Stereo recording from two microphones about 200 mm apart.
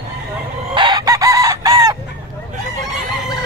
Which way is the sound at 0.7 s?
20° right (ahead or behind).